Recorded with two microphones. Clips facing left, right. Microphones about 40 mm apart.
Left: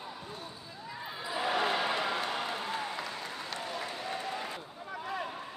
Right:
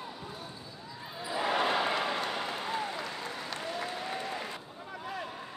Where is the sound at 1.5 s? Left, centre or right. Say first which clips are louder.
Right 2 dB; centre.